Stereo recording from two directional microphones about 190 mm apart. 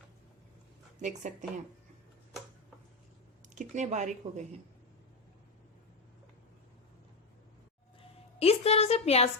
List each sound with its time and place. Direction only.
1.0 s speech: 40° right (ahead or behind)
3.5 s speech: 40° right (ahead or behind)
8.4 s a woman's voice: 30° left (ahead or behind)